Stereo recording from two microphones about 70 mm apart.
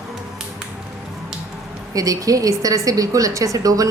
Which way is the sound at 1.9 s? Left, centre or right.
Right.